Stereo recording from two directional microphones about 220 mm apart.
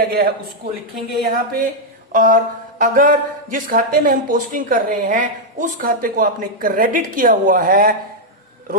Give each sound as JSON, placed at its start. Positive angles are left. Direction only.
{"t": 0.0, "sound": "a man's voice", "side_deg": -45}
{"t": 2.1, "sound": "speech", "side_deg": -40}